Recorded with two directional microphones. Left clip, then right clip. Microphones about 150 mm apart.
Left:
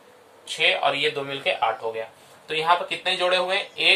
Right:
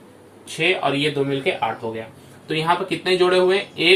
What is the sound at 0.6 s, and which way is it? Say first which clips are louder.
Speech: right 1 dB; 30° left (ahead or behind).